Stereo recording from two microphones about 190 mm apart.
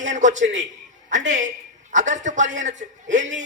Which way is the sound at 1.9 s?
40° right (ahead or behind).